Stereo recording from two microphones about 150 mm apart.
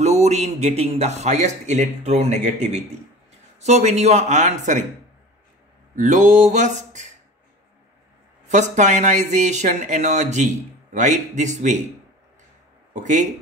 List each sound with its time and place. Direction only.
0.0 s speech: 45° right (ahead or behind)
5.9 s speech: 55° right (ahead or behind)
8.5 s speech: 50° right (ahead or behind)
12.9 s speech: 55° right (ahead or behind)